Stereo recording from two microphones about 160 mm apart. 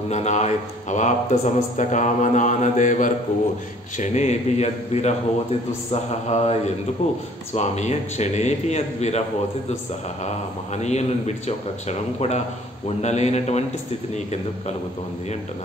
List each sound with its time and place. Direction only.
0.1 s speech: 45° left (ahead or behind)
7.5 s speech: 45° left (ahead or behind)
10.2 s speech: 45° left (ahead or behind)